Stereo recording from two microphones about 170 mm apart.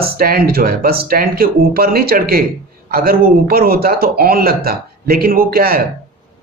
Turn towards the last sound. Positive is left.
turn(degrees=-60)  # may be behind; listen again after turning